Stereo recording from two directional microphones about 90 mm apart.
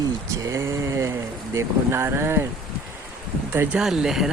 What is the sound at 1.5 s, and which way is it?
Speech, 30° right (ahead or behind).